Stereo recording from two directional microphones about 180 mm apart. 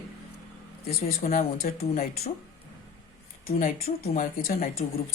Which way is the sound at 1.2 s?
50° left (ahead or behind).